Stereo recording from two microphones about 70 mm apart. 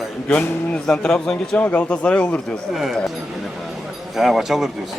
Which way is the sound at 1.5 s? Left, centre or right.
Centre.